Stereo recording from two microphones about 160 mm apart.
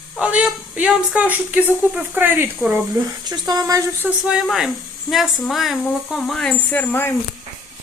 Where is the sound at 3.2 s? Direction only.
25° right (ahead or behind).